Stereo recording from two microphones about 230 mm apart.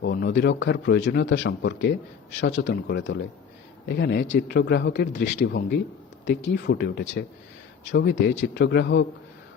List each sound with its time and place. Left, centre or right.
0.0 s a man's voice: left